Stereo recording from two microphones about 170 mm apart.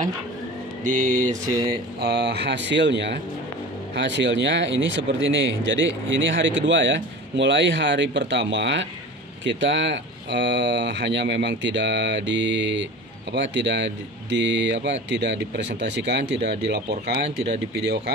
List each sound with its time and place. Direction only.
0.8 s mantra: 50° right (ahead or behind)
1.7 s speech: 75° right (ahead or behind)